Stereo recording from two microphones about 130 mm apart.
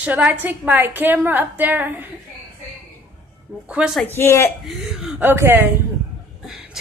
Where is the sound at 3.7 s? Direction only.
10° right (ahead or behind).